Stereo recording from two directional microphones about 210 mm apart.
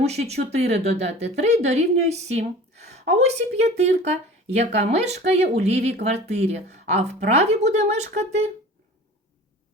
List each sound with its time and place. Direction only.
0.0 s speech: 30° right (ahead or behind)